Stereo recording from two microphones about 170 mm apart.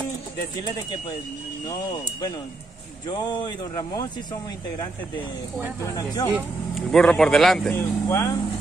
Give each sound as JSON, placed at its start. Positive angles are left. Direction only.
{"t": 1.7, "sound": "speech", "side_deg": 20}
{"t": 6.3, "sound": "speech", "side_deg": 0}
{"t": 7.7, "sound": "speech", "side_deg": 15}